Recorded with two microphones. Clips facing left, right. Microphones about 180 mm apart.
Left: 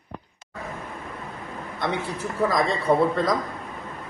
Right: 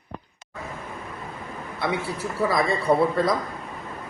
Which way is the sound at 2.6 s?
5° right (ahead or behind).